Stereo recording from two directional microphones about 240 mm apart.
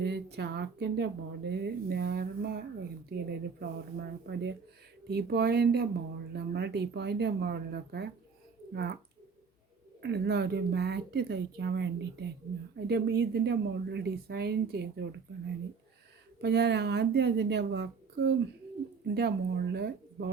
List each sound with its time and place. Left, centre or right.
0.0 s speech: right
5.0 s speech: right
10.0 s speech: right
16.4 s speech: right